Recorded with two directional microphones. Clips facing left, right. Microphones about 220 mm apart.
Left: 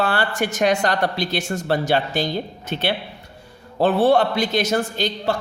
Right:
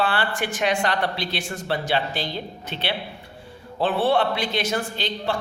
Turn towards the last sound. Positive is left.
turn(degrees=40)  # may be behind; listen again after turning